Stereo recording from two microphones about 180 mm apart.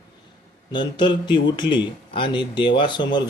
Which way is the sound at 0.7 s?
25° left (ahead or behind).